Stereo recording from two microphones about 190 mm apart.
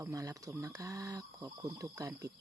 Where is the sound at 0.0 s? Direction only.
15° right (ahead or behind).